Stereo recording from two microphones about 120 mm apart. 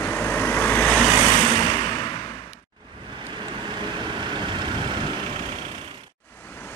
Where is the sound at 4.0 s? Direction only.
40° right (ahead or behind).